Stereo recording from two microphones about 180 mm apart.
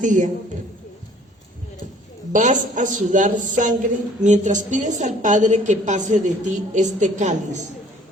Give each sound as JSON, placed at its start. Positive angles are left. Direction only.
{"t": 0.0, "sound": "a woman's voice", "side_deg": -45}
{"t": 2.3, "sound": "a woman's voice", "side_deg": -45}